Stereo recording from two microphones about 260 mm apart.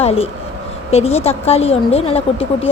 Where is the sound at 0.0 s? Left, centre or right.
Left.